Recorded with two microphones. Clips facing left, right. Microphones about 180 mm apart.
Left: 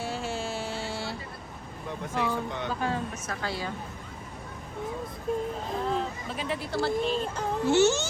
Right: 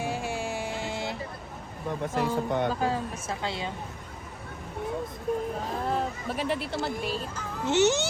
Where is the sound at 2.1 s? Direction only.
45° right (ahead or behind).